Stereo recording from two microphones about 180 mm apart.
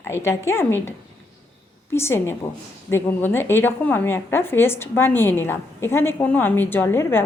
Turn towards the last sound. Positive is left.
turn(degrees=15)  # may be behind; listen again after turning